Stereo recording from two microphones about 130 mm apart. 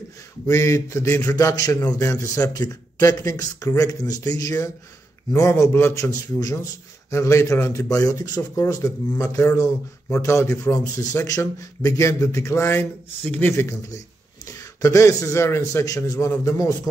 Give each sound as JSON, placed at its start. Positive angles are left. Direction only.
{"t": 0.5, "sound": "a man's voice", "side_deg": 25}
{"t": 13.5, "sound": "a man's voice", "side_deg": 20}